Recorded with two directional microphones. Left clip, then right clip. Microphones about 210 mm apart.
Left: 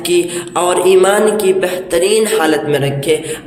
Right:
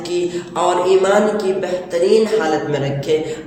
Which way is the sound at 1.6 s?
45° left (ahead or behind).